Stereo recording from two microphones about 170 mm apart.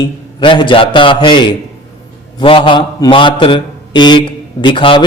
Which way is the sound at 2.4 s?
30° left (ahead or behind).